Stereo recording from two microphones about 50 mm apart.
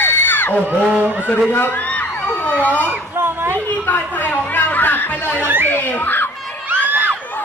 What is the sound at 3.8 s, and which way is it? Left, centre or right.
Speech, left.